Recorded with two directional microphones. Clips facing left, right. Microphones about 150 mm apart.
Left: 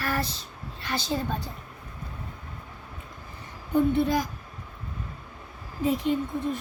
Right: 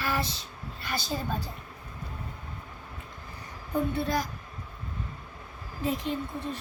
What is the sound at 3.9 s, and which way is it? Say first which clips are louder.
Speech: left 5 dB; 15° left (ahead or behind).